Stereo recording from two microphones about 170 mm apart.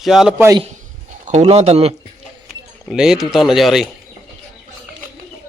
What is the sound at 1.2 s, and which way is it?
Speech, 40° right (ahead or behind).